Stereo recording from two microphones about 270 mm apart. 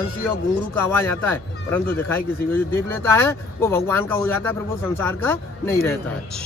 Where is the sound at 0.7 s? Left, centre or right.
Centre.